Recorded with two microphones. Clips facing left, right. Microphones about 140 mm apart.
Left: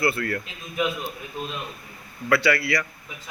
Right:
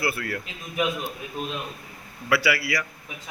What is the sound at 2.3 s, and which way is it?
Speech, 10° right (ahead or behind).